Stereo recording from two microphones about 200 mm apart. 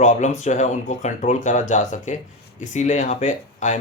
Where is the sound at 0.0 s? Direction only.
40° left (ahead or behind).